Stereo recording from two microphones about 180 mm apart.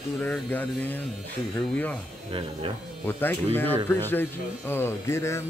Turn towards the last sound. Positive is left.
turn(degrees=15)  # may be behind; listen again after turning